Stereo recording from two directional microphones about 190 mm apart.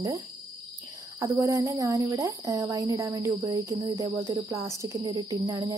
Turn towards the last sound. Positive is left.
turn(degrees=-20)  # may be behind; listen again after turning